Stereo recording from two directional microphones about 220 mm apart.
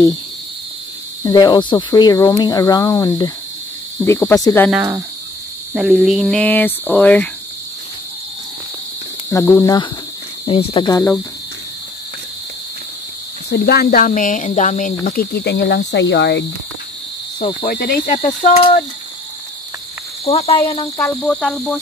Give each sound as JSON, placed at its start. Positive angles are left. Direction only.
{"t": 1.2, "sound": "speech", "side_deg": 20}
{"t": 4.6, "sound": "speech", "side_deg": -5}
{"t": 9.3, "sound": "speech", "side_deg": 15}
{"t": 13.5, "sound": "speech", "side_deg": 45}
{"t": 17.6, "sound": "speech", "side_deg": 45}
{"t": 18.4, "sound": "speech", "side_deg": 25}
{"t": 20.2, "sound": "speech", "side_deg": 25}
{"t": 21.0, "sound": "speech", "side_deg": 5}